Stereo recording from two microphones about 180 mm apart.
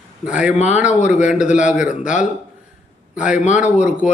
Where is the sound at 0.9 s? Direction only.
40° left (ahead or behind).